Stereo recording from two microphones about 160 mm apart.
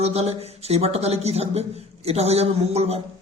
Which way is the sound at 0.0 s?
40° right (ahead or behind).